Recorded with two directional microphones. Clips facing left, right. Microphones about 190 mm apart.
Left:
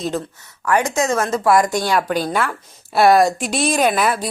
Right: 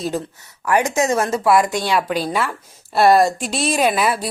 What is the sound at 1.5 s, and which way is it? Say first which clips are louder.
A woman's voice: left 1 dB; 5° right (ahead or behind).